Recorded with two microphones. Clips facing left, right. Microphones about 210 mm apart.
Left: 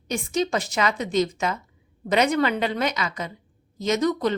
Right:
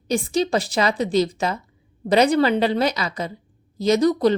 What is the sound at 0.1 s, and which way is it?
A woman's voice, 35° right (ahead or behind).